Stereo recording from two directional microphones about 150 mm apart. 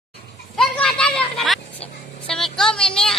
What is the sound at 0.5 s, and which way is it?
Children playing, 5° left (ahead or behind).